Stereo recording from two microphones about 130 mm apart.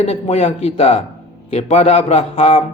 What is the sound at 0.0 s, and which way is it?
Speech, 50° left (ahead or behind).